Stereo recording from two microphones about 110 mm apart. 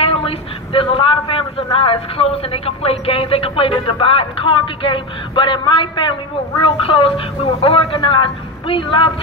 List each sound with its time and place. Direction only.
0.0 s a man's voice: 60° left (ahead or behind)
7.9 s a woman's voice: 50° left (ahead or behind)